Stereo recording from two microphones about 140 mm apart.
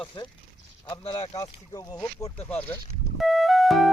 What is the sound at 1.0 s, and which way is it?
Speech, 40° left (ahead or behind).